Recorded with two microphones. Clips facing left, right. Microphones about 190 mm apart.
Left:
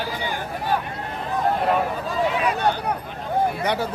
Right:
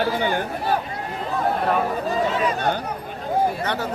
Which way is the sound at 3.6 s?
10° left (ahead or behind).